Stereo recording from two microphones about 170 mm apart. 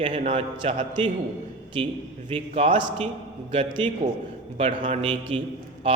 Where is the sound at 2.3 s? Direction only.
40° right (ahead or behind).